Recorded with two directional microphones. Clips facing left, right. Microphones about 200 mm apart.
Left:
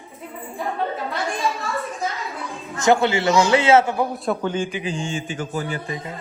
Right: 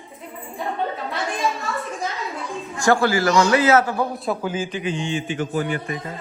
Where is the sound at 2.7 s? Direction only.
20° left (ahead or behind).